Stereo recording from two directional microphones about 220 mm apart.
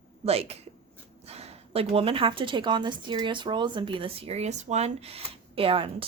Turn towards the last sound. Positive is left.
turn(degrees=-25)  # may be behind; listen again after turning